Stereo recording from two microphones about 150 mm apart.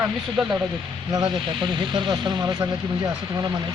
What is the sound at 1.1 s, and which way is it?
Speech, 30° right (ahead or behind).